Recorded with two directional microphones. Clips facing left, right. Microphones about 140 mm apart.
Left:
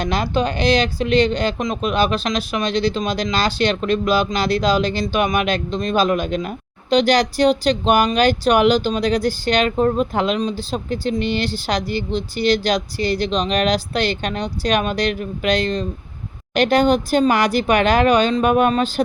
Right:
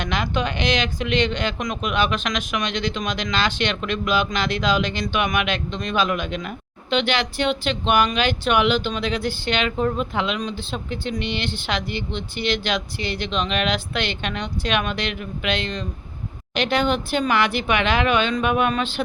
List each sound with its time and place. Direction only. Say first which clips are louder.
0.0 s speech: left 4 dB; 35° left (ahead or behind)